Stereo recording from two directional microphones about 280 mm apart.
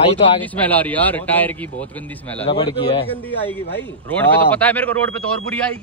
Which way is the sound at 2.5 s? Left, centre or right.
Centre.